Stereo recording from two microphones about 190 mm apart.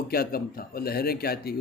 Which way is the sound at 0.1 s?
50° left (ahead or behind).